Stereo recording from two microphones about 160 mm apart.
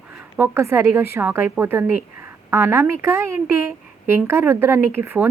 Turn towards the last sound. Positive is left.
turn(degrees=-15)  # may be behind; listen again after turning